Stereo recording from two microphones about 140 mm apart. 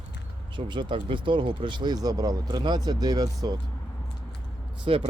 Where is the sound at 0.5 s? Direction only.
35° right (ahead or behind).